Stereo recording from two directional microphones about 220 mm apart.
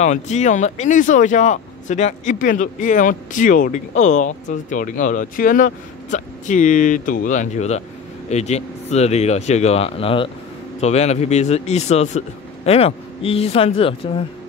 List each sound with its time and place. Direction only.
0.0 s speech: 30° left (ahead or behind)